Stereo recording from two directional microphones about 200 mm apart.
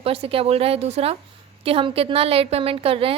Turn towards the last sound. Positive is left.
turn(degrees=-30)  # may be behind; listen again after turning